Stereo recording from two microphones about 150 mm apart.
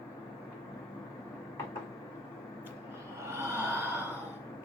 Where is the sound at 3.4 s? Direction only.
15° right (ahead or behind).